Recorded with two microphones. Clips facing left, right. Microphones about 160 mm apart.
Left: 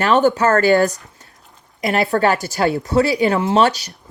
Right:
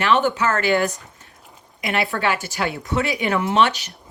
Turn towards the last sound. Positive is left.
turn(degrees=40)  # may be behind; listen again after turning